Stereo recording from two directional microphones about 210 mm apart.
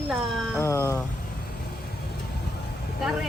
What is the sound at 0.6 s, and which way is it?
Speech, 15° left (ahead or behind).